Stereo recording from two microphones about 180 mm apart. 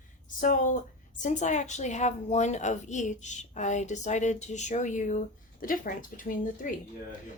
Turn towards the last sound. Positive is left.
turn(degrees=50)  # may be behind; listen again after turning